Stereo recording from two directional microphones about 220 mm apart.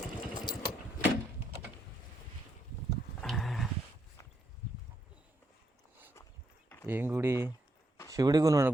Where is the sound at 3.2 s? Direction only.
Centre (ahead or behind).